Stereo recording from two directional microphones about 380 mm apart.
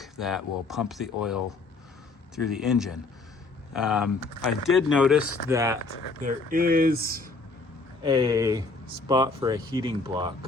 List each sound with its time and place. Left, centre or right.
0.0 s speech: centre
6.2 s speech: right
8.0 s speech: centre